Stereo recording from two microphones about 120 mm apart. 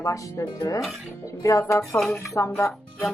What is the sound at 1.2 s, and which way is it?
Speech, 25° left (ahead or behind).